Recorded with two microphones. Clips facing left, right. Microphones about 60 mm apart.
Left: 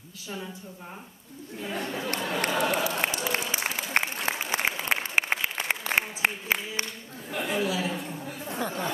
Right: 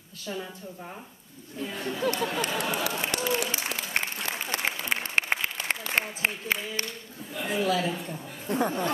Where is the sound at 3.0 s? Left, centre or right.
Left.